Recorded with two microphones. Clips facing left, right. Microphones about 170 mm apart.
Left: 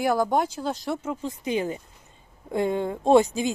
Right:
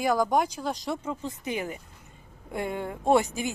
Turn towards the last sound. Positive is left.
turn(degrees=20)  # may be behind; listen again after turning